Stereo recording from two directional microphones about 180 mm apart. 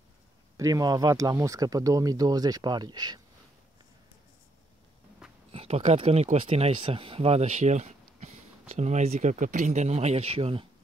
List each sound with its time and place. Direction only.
0.6 s speech: 20° right (ahead or behind)
5.5 s speech: 35° right (ahead or behind)